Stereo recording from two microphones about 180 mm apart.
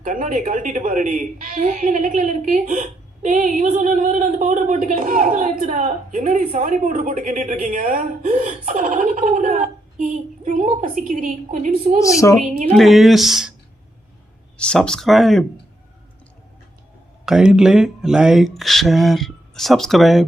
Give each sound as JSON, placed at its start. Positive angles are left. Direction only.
{"t": 0.0, "sound": "speech", "side_deg": -45}
{"t": 11.9, "sound": "a woman's voice", "side_deg": 15}
{"t": 12.7, "sound": "speech", "side_deg": 0}
{"t": 14.6, "sound": "speech", "side_deg": 5}
{"t": 17.2, "sound": "speech", "side_deg": -5}